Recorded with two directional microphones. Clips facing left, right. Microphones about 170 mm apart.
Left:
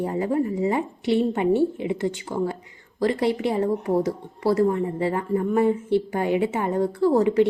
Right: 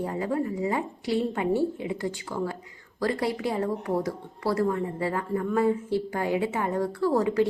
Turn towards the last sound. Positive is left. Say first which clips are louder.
# left 5 dB
turn(degrees=20)  # may be behind; listen again after turning